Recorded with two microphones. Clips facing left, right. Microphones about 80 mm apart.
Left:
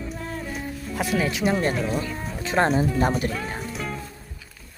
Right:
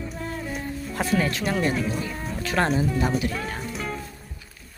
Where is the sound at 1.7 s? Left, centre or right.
Centre.